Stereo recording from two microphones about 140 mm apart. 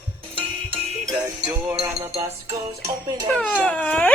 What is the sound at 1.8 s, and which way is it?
Music, 35° right (ahead or behind).